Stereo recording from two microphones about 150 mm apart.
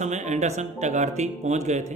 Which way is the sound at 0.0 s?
50° right (ahead or behind).